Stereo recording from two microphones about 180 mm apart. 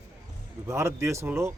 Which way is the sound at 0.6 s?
15° right (ahead or behind).